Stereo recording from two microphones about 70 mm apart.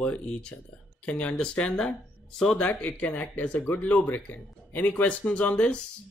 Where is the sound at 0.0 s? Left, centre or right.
Centre.